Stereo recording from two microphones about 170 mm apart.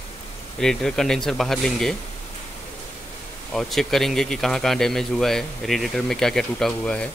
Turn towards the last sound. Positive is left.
turn(degrees=5)  # may be behind; listen again after turning